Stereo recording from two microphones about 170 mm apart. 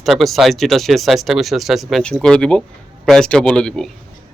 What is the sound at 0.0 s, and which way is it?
Speech, centre (ahead or behind).